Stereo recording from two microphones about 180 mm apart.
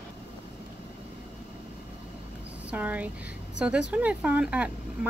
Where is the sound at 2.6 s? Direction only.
10° right (ahead or behind).